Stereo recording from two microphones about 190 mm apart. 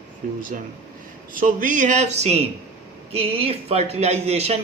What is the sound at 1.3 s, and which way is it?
Speech, 45° right (ahead or behind).